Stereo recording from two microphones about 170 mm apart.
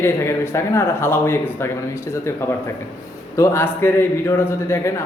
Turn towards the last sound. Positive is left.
turn(degrees=15)  # may be behind; listen again after turning